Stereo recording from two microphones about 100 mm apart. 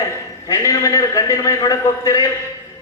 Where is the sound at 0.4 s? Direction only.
35° left (ahead or behind).